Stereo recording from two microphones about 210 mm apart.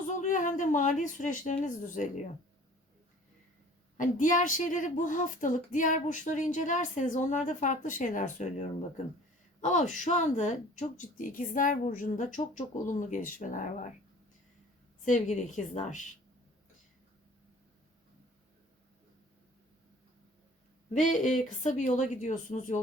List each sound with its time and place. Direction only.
0.2 s a sound: 35° left (ahead or behind)
1.6 s speech: 35° left (ahead or behind)
3.9 s speech: 40° left (ahead or behind)
9.6 s speech: 35° left (ahead or behind)
15.0 s speech: 35° left (ahead or behind)
20.9 s speech: 35° left (ahead or behind)